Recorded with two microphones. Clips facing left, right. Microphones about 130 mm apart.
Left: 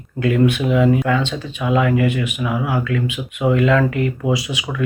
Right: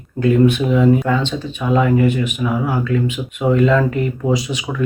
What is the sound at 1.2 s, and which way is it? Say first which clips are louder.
Speech: right 1 dB; 5° left (ahead or behind).